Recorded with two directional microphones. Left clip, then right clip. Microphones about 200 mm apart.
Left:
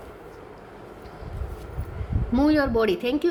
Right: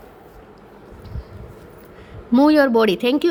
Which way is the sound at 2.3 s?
30° right (ahead or behind).